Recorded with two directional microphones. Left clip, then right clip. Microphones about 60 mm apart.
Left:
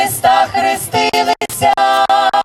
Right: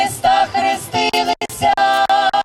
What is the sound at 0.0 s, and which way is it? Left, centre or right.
Music, left.